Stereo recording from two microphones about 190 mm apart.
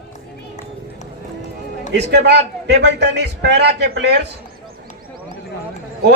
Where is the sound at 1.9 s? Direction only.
60° right (ahead or behind).